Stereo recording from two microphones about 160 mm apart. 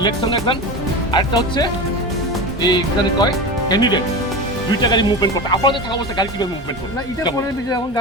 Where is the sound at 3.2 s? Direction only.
25° left (ahead or behind).